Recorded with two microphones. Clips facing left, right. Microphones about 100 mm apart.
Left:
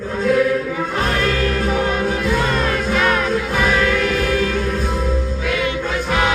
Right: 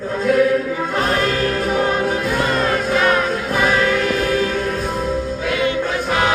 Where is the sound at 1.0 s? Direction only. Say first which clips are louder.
Right 1 dB; 30° right (ahead or behind).